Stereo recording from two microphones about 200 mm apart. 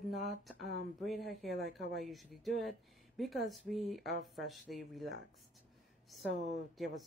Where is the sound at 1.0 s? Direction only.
Centre (ahead or behind).